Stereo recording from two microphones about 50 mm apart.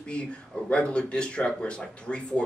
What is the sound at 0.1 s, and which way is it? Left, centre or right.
Speech, left.